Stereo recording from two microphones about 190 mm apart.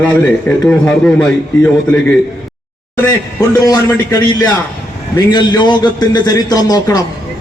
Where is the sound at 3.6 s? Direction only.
20° left (ahead or behind).